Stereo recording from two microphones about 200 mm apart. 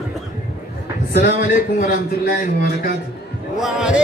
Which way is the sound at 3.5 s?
5° right (ahead or behind).